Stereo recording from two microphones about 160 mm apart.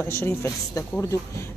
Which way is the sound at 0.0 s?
15° left (ahead or behind).